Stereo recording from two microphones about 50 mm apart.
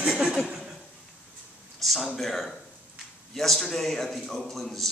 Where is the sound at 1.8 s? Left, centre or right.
Centre.